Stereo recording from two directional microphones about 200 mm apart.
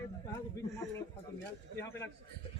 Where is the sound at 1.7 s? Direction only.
15° left (ahead or behind).